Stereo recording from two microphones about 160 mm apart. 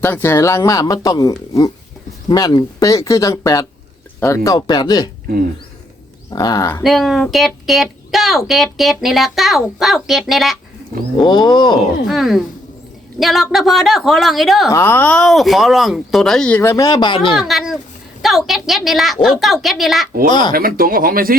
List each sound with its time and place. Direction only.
0.0 s speech: 15° left (ahead or behind)
6.3 s speech: 25° left (ahead or behind)
6.8 s a woman's voice: centre (ahead or behind)
11.3 s speech: 25° left (ahead or behind)
12.0 s speech: centre (ahead or behind)
14.7 s speech: 15° left (ahead or behind); by 17.3 s 30° left (ahead or behind)
17.3 s speech: centre (ahead or behind)
20.5 s speech: 65° right (ahead or behind)